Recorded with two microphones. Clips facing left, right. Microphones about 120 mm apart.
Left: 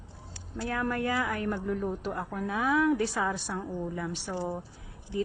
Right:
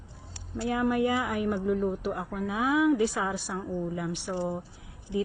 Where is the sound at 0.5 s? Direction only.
15° right (ahead or behind).